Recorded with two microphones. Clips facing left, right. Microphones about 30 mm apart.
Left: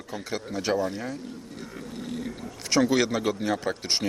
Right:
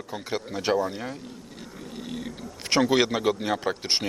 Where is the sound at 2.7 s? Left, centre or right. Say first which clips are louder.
Right 1 dB; right.